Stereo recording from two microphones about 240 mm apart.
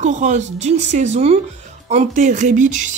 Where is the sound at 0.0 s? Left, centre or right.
Right.